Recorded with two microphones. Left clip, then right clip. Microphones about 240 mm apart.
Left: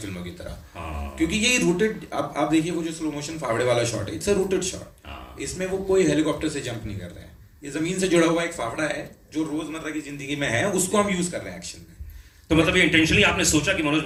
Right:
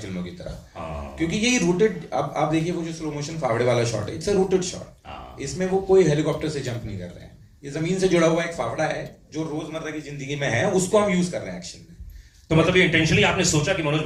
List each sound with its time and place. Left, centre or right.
1.3 s a man's voice: left
7.6 s a man's voice: left